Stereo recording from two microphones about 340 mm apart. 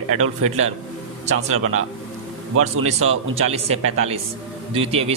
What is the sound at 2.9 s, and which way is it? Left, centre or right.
A man's voice, centre.